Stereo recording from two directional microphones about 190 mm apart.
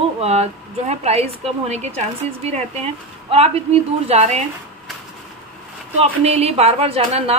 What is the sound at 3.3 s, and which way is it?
A woman's voice, 35° right (ahead or behind).